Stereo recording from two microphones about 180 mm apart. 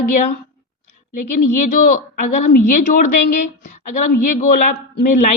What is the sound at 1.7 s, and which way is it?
Speech, 50° left (ahead or behind).